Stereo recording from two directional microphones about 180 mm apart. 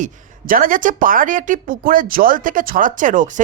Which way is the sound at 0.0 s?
50° right (ahead or behind).